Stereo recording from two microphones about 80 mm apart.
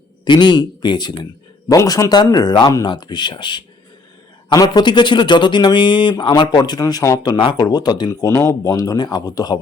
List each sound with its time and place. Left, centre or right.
0.3 s speech: left
1.7 s speech: left
4.5 s speech: left
6.6 s speech: left
8.3 s speech: left